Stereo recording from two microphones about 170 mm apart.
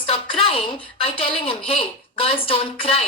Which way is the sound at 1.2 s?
35° left (ahead or behind).